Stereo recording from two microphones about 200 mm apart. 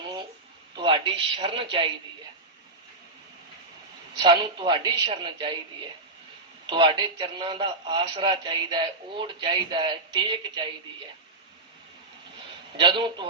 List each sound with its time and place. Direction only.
0.8 s speech: 25° right (ahead or behind)
4.2 s a man's voice: 25° right (ahead or behind)
6.7 s a man's voice: 25° right (ahead or behind)
12.7 s a man's voice: 25° right (ahead or behind)